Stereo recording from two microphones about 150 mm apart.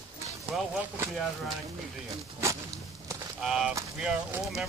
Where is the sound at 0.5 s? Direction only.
Centre (ahead or behind).